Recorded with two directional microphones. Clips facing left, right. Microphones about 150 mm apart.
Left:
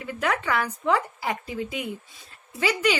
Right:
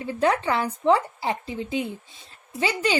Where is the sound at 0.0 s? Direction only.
30° right (ahead or behind).